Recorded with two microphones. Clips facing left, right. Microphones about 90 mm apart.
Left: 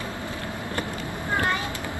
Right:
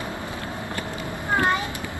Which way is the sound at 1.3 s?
20° right (ahead or behind).